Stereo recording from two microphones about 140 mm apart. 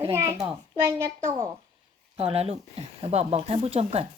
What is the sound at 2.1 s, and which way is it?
Speech, 45° right (ahead or behind).